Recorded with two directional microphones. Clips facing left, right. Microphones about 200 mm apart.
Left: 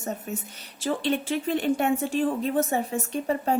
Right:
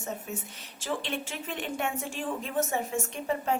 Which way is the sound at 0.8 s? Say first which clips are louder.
Left 7 dB; 35° left (ahead or behind).